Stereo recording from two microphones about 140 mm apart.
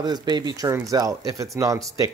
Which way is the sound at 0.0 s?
30° right (ahead or behind).